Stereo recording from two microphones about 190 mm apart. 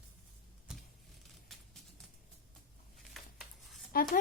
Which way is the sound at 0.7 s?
5° right (ahead or behind).